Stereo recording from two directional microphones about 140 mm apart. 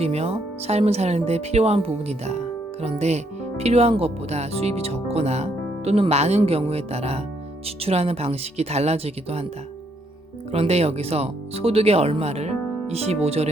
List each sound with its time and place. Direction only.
0.0 s speech: 50° right (ahead or behind)
10.5 s speech: 45° right (ahead or behind)